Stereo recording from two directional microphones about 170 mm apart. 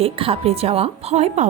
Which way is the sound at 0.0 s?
35° right (ahead or behind).